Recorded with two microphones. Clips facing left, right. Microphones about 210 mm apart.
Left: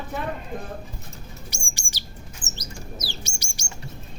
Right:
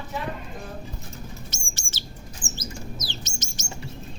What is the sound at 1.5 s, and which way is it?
Chirp, 15° left (ahead or behind).